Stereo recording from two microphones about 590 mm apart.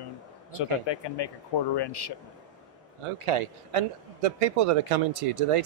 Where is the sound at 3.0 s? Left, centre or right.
Right.